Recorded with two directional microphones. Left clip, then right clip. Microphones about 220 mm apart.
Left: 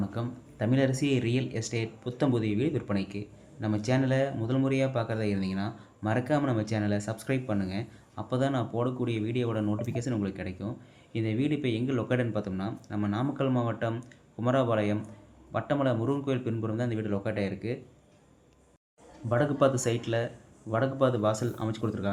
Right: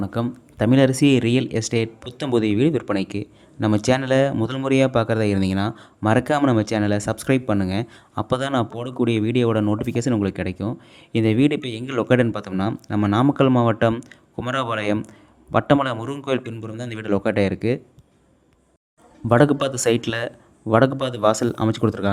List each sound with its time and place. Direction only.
0.0 s speech: 45° right (ahead or behind)
19.3 s speech: 45° right (ahead or behind)